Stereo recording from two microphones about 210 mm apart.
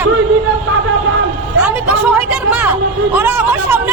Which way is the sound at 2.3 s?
5° right (ahead or behind).